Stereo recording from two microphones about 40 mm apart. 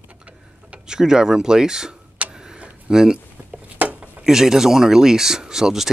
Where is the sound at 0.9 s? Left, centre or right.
Centre.